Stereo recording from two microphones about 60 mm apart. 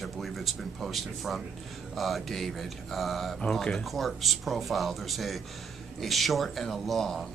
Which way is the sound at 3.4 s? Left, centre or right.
Centre.